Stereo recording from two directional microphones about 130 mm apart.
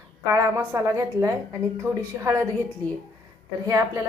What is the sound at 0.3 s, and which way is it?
Speech, 25° right (ahead or behind).